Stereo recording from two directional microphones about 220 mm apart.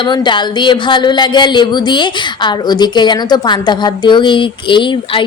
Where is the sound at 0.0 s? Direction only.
20° left (ahead or behind).